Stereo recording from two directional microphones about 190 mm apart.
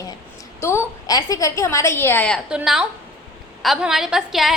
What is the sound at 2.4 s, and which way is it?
A woman's voice, 5° right (ahead or behind).